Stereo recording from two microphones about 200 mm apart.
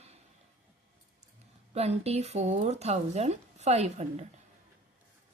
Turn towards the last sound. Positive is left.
turn(degrees=-35)  # may be behind; listen again after turning